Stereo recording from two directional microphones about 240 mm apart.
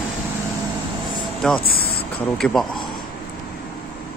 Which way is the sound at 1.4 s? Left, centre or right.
Centre.